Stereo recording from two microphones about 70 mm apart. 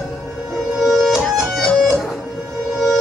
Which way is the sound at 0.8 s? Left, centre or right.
Centre.